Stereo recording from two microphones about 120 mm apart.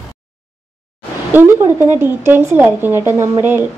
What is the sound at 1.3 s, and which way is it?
Speech, 20° right (ahead or behind).